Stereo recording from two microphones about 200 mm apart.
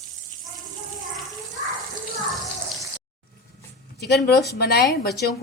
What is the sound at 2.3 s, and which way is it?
Water, centre (ahead or behind).